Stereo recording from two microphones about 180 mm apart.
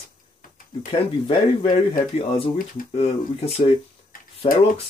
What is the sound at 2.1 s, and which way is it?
Speech, 30° left (ahead or behind).